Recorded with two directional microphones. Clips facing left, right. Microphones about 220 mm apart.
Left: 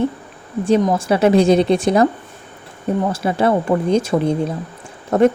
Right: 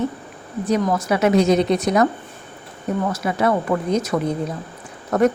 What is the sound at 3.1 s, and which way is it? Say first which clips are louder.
Speech: left 3 dB; 30° left (ahead or behind).